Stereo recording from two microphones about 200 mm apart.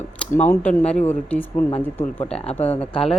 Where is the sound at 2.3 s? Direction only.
30° left (ahead or behind).